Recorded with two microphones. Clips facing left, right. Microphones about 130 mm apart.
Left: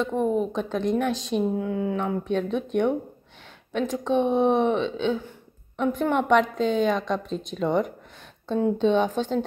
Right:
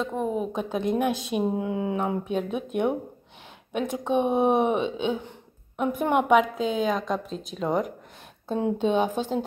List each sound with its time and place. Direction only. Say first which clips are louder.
0.0 s a woman's voice: left 4 dB; centre (ahead or behind); by 2.1 s 20° right (ahead or behind)
2.2 s a woman's voice: left 2 dB; 10° right (ahead or behind)